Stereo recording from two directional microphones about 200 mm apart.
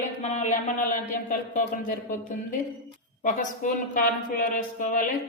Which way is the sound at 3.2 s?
40° left (ahead or behind).